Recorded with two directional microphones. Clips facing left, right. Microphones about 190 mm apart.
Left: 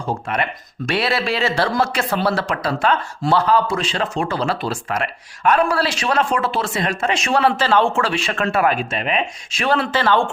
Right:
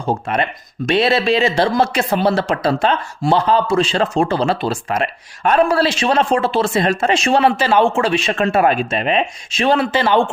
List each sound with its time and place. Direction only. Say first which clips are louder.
0.1 s speech: right 4 dB; 25° right (ahead or behind)
7.4 s speech: right 2 dB; 15° right (ahead or behind)